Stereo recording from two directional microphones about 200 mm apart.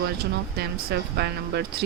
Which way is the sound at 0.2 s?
55° right (ahead or behind).